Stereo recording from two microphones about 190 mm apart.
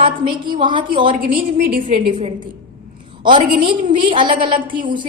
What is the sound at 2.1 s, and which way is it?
A woman's voice, 25° right (ahead or behind).